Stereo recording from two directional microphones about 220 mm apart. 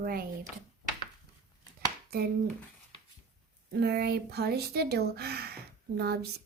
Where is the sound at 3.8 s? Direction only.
45° right (ahead or behind).